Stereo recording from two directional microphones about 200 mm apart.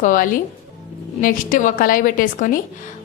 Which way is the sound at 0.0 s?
40° left (ahead or behind).